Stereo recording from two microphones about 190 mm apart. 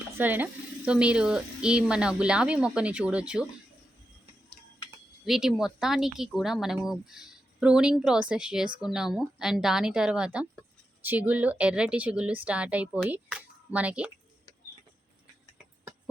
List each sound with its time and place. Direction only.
0.2 s speech: 10° right (ahead or behind)
5.2 s speech: centre (ahead or behind)